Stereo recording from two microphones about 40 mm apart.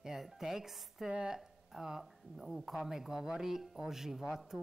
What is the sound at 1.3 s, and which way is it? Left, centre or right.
A woman's voice, centre.